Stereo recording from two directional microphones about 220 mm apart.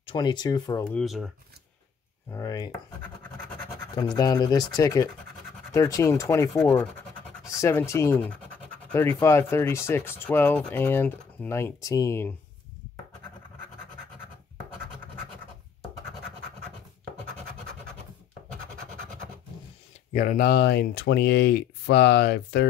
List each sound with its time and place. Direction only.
0.0 s speech: 20° left (ahead or behind)
0.9 s speech: centre (ahead or behind)
2.3 s speech: 15° left (ahead or behind)
3.9 s speech: 20° left (ahead or behind)
20.1 s speech: 35° left (ahead or behind)